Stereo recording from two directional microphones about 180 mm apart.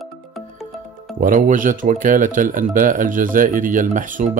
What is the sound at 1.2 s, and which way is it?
Speech, 45° right (ahead or behind).